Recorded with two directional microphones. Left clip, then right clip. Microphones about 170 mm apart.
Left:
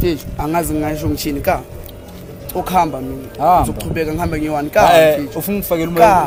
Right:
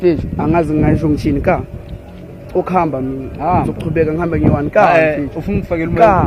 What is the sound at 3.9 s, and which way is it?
Speech, 45° right (ahead or behind).